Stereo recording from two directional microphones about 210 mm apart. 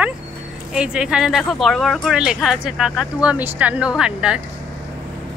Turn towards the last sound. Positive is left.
turn(degrees=-5)  # may be behind; listen again after turning